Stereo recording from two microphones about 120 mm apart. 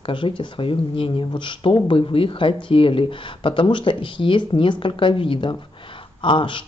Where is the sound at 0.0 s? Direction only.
45° left (ahead or behind).